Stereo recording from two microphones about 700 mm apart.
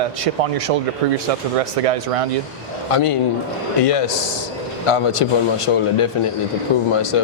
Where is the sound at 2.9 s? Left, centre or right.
Left.